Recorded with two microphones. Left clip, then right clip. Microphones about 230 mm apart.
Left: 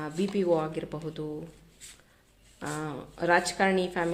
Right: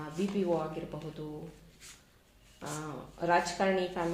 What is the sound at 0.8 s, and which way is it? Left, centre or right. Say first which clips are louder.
Speech: left 6 dB; left.